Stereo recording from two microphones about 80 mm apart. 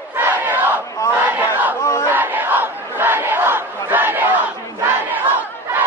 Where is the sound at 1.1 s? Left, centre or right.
Right.